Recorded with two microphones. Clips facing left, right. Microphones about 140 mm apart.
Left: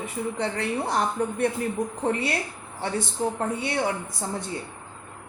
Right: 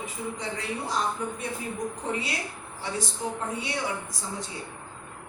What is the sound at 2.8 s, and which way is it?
A woman's voice, 60° left (ahead or behind).